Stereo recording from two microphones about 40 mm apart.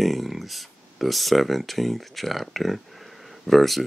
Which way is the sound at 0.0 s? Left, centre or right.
Centre.